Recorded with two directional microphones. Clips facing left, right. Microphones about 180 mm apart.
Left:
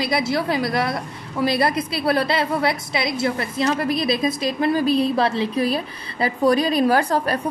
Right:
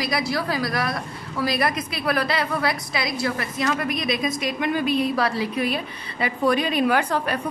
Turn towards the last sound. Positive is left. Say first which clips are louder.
# left 3 dB
turn(degrees=40)  # may be behind; listen again after turning